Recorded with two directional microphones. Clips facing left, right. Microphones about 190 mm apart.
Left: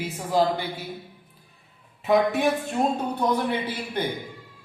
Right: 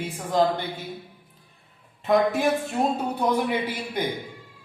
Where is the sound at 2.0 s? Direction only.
Centre (ahead or behind).